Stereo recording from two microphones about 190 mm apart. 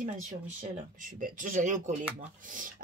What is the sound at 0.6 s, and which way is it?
A woman's voice, 45° right (ahead or behind).